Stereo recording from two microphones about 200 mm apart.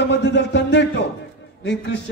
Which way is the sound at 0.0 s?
60° left (ahead or behind).